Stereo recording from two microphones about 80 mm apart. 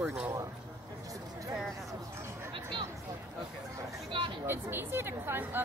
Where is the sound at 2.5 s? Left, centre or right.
Right.